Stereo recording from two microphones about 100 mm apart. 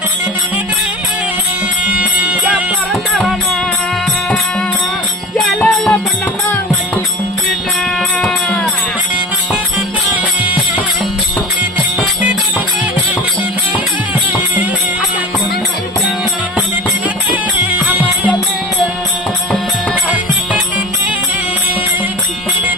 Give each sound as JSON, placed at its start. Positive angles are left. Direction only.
{"t": 2.3, "sound": "music", "side_deg": -15}
{"t": 2.9, "sound": "music", "side_deg": 0}
{"t": 5.5, "sound": "music", "side_deg": 10}
{"t": 17.7, "sound": "music", "side_deg": -15}